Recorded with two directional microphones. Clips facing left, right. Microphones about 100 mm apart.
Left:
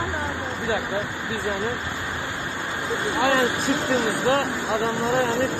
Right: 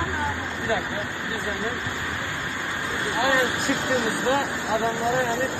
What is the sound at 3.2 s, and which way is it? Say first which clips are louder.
Speech: left 1 dB; 35° left (ahead or behind).